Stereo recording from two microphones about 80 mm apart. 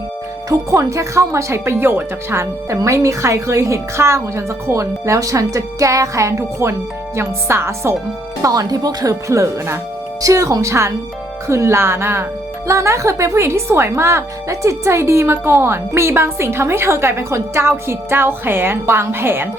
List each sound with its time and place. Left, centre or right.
0.5 s speech: right
8.4 s speech: right
9.3 s speech: right